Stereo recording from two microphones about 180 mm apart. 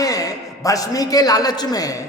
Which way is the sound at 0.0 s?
20° left (ahead or behind).